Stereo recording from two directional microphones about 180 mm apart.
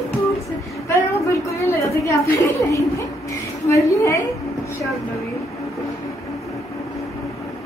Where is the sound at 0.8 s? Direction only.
15° left (ahead or behind).